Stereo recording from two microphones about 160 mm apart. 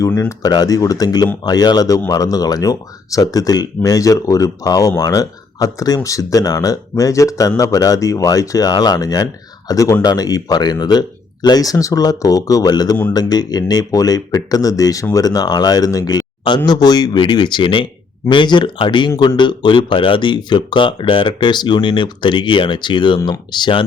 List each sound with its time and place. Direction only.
0.1 s speech: 10° left (ahead or behind)
0.4 s speech: 25° left (ahead or behind)